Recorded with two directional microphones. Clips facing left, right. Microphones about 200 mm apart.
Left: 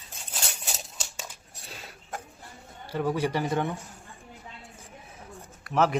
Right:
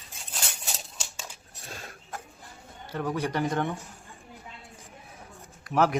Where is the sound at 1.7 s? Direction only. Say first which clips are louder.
Right 3 dB; 45° right (ahead or behind).